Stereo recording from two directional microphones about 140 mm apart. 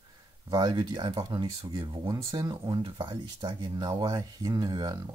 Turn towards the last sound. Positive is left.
turn(degrees=-30)  # may be behind; listen again after turning